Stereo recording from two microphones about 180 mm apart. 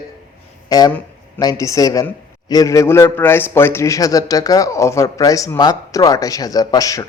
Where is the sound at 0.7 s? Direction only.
20° left (ahead or behind).